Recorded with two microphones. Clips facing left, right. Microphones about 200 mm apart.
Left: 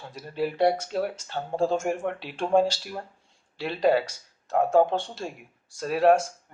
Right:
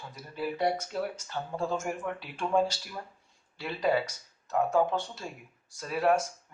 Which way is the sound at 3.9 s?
30° left (ahead or behind).